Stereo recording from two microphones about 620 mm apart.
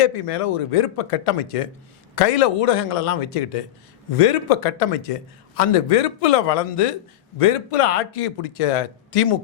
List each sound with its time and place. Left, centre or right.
0.0 s a man's voice: left